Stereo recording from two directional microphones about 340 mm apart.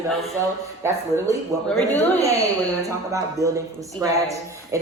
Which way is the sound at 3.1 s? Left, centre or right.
Centre.